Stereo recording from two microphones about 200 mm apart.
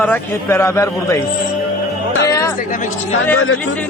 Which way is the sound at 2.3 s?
15° left (ahead or behind).